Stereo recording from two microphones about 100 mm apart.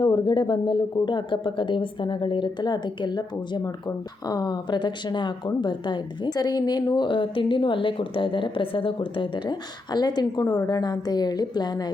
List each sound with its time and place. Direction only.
0.0 s speech: 50° left (ahead or behind)